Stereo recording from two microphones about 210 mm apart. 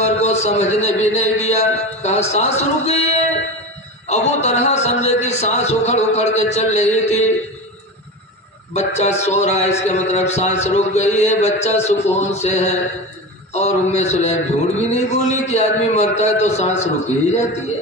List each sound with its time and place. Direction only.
0.0 s a sound: 30° left (ahead or behind)
4.1 s a man's voice: 30° left (ahead or behind)
8.7 s a man's voice: 35° left (ahead or behind)